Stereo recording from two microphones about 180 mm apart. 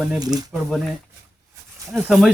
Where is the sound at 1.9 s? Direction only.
5° right (ahead or behind).